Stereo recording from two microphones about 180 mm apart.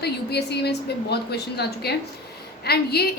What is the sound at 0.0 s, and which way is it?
A woman's voice, 65° left (ahead or behind).